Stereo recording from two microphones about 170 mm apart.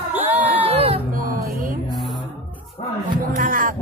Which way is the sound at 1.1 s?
55° right (ahead or behind).